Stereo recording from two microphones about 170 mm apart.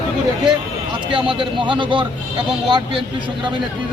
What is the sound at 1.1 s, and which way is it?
Speech, 30° right (ahead or behind).